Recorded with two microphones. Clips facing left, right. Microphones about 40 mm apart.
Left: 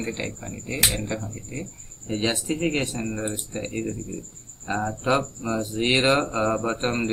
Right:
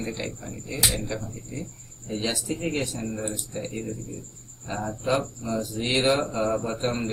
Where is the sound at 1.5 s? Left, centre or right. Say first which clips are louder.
Left 1 dB; left.